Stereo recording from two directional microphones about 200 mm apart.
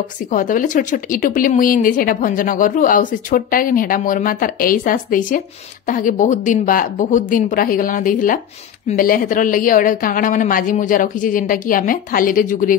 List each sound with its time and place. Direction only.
0.3 s a woman's voice: 40° left (ahead or behind)